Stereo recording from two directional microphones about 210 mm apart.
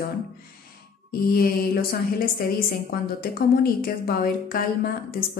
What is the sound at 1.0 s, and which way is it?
A woman's voice, 45° left (ahead or behind).